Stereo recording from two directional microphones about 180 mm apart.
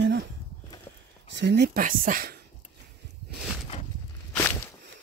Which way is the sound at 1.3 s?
70° right (ahead or behind).